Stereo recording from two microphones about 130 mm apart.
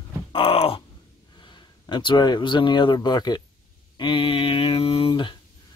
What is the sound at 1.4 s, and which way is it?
Speech, 35° left (ahead or behind).